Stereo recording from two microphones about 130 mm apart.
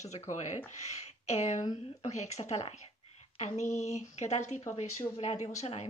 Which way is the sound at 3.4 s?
60° left (ahead or behind).